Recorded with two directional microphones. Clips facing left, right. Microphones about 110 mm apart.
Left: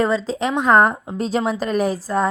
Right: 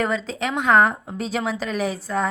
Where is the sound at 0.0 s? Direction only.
30° left (ahead or behind).